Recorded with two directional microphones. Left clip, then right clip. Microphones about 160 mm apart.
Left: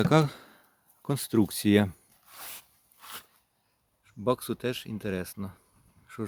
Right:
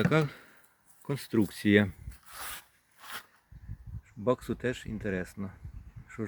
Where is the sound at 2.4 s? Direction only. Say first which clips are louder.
Right 4 dB; 15° left (ahead or behind).